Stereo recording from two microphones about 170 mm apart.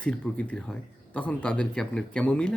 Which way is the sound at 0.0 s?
5° left (ahead or behind).